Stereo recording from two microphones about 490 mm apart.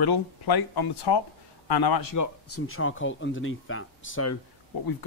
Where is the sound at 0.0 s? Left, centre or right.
Left.